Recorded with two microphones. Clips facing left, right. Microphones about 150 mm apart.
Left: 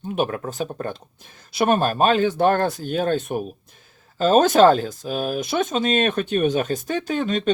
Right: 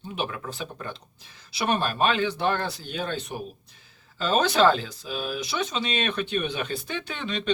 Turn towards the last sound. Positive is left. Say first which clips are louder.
# left 9 dB
turn(degrees=45)  # may be behind; listen again after turning